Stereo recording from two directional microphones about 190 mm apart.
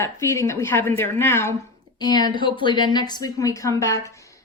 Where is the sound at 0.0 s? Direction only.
15° left (ahead or behind).